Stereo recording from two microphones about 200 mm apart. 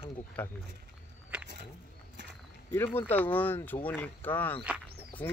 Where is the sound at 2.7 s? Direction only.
10° left (ahead or behind).